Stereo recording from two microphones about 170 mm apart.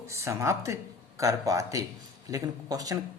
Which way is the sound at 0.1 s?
15° right (ahead or behind).